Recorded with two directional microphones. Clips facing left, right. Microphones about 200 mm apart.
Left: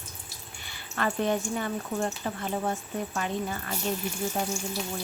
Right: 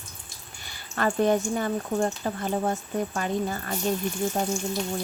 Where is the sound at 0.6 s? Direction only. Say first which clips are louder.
Right 3 dB; 40° right (ahead or behind).